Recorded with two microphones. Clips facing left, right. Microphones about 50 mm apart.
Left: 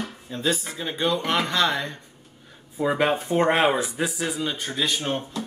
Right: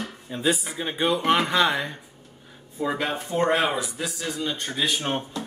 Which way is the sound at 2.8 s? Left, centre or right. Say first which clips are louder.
Left 3 dB; centre.